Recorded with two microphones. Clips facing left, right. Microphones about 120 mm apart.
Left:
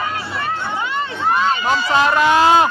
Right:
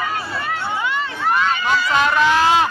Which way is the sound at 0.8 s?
30° left (ahead or behind).